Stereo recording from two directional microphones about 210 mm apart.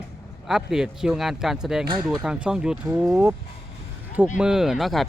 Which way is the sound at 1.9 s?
20° right (ahead or behind).